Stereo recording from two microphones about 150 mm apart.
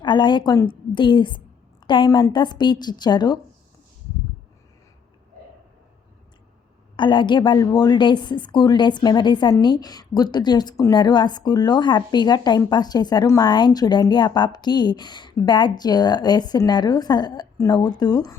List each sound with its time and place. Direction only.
0.0 s a woman's voice: 30° left (ahead or behind)
6.9 s a woman's voice: 30° left (ahead or behind)